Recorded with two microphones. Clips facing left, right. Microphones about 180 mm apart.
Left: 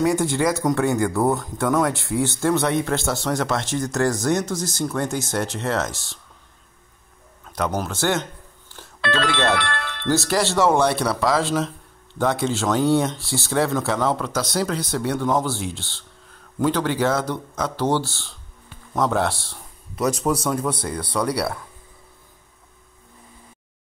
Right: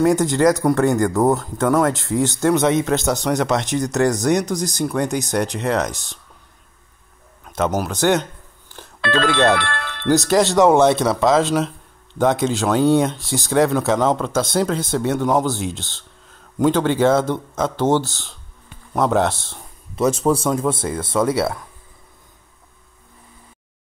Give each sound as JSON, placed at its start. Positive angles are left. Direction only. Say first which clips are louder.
{"t": 0.1, "sound": "speech", "louder": "right 5 dB", "side_deg": -15}
{"t": 7.4, "sound": "a sound", "louder": "right 4 dB", "side_deg": -20}
{"t": 7.8, "sound": "speech", "louder": "right 5 dB", "side_deg": -15}
{"t": 9.0, "sound": "speech", "louder": "right 5 dB", "side_deg": -45}
{"t": 10.0, "sound": "speech", "louder": "right 5 dB", "side_deg": -20}